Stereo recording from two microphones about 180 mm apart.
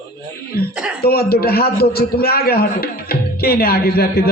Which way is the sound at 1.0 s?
60° left (ahead or behind).